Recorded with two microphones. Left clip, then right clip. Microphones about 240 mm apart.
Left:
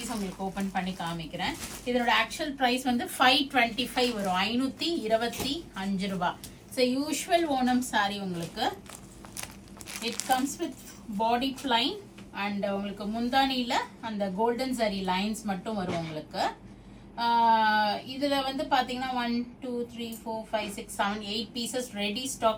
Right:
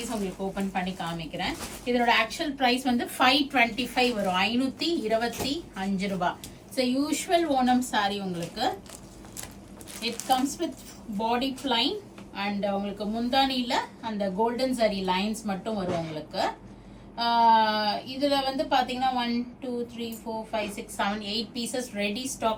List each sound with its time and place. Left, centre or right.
0.0 s a woman's voice: centre
9.9 s a woman's voice: centre
20.5 s a woman's voice: centre